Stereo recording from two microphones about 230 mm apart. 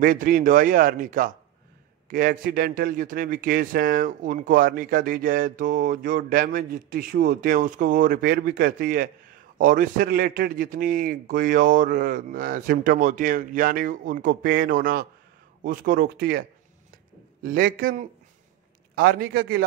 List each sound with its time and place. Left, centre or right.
0.0 s a man's voice: right